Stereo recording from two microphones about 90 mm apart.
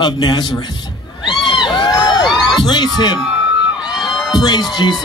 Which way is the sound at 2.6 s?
55° left (ahead or behind).